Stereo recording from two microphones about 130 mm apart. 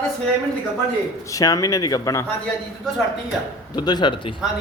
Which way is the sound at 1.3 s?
25° left (ahead or behind).